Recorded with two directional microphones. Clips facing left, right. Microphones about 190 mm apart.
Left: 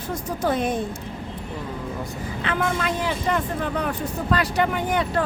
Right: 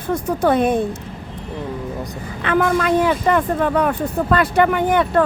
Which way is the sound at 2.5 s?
60° right (ahead or behind).